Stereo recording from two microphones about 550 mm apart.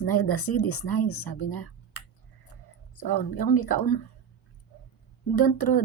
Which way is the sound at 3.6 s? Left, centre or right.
Left.